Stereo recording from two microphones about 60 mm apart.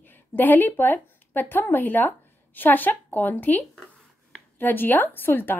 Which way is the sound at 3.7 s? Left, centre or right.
Centre.